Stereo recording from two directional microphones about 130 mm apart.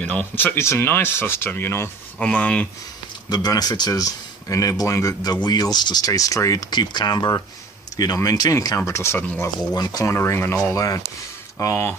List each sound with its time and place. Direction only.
0.0 s speech: 10° left (ahead or behind)
3.3 s speech: 30° left (ahead or behind)